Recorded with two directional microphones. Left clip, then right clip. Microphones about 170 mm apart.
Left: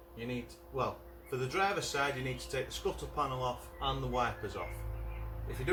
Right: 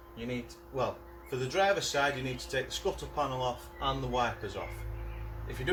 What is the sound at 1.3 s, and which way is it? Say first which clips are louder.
Speech: right 4 dB; 5° right (ahead or behind).